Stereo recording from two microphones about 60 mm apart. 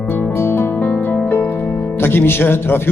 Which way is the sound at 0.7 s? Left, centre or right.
Left.